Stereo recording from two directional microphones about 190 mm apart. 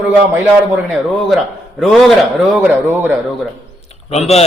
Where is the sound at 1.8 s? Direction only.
Centre (ahead or behind).